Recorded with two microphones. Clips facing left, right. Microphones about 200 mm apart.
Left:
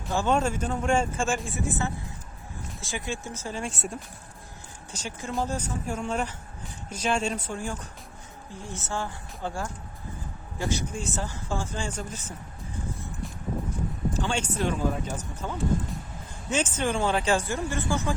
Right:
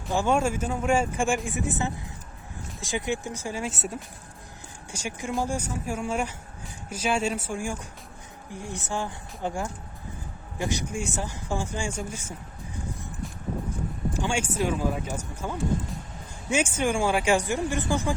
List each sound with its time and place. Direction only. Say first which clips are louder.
0.1 s speech: right 1 dB; 10° right (ahead or behind)
14.1 s speech: right 2 dB; 10° right (ahead or behind)